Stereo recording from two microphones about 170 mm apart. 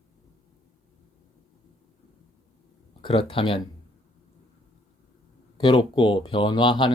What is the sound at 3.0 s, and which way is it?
Speech, 30° left (ahead or behind).